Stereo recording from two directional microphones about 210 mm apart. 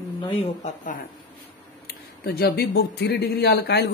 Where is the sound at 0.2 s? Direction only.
30° left (ahead or behind).